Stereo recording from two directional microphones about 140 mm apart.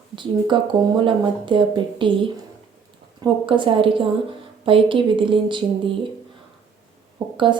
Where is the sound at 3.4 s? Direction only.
35° right (ahead or behind).